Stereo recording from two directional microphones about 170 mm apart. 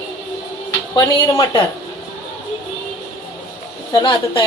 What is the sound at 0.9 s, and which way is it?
Speech, 25° left (ahead or behind).